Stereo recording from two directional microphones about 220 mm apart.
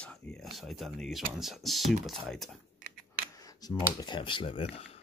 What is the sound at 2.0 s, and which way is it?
Speech, centre (ahead or behind).